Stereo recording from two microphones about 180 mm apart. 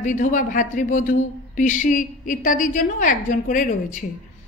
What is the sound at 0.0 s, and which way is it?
Speech, 45° left (ahead or behind).